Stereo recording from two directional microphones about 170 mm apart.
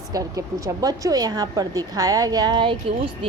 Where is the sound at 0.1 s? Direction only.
20° right (ahead or behind).